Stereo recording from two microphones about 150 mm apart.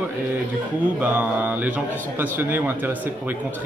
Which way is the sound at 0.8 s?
10° right (ahead or behind).